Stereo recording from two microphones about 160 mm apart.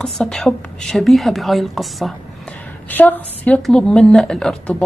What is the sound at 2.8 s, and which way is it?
A woman's voice, 10° left (ahead or behind).